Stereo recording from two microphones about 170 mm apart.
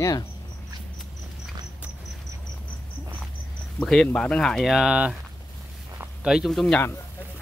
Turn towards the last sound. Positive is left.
turn(degrees=0)  # may be behind; listen again after turning